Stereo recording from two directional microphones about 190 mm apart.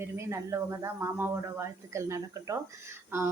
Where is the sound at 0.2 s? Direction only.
15° right (ahead or behind).